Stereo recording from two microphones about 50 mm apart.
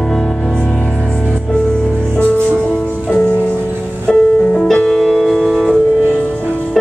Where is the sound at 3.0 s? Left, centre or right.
Left.